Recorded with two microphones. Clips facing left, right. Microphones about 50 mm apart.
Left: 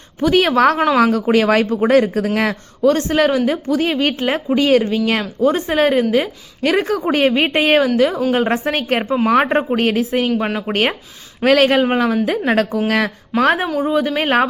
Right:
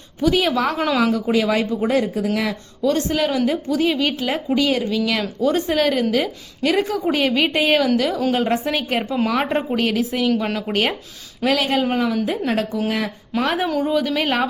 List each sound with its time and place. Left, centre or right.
0.2 s speech: left
2.8 s a woman's voice: left
7.1 s a woman's voice: left
11.4 s a woman's voice: left
13.7 s speech: left